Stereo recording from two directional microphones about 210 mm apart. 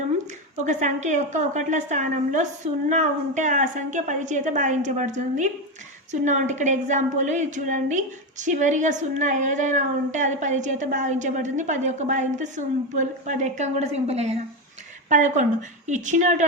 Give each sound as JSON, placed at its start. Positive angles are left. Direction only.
{"t": 0.6, "sound": "a woman's voice", "side_deg": -35}